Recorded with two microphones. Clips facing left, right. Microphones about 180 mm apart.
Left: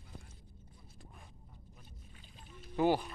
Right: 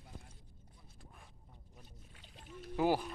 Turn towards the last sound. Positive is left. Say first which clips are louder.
# left 2 dB
turn(degrees=-5)  # may be behind; listen again after turning